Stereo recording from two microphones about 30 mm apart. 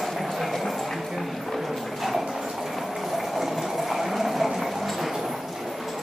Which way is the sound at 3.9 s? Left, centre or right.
Centre.